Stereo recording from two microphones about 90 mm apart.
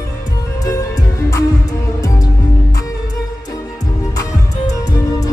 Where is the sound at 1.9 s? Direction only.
40° left (ahead or behind).